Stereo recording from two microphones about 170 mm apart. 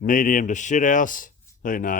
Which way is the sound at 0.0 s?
50° left (ahead or behind).